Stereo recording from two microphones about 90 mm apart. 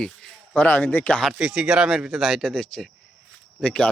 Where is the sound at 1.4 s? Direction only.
10° right (ahead or behind).